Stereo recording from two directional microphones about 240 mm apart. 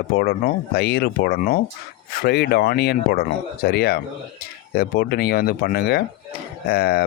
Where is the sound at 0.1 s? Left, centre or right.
Left.